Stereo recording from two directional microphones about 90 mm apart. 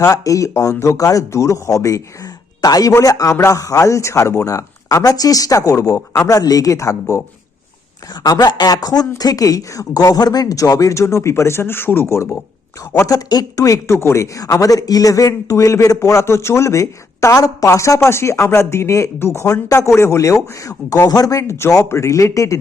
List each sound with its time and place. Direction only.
0.0 s speech: 40° left (ahead or behind)
8.2 s speech: 45° left (ahead or behind); by 12.4 s 30° left (ahead or behind)
13.1 s speech: 40° left (ahead or behind)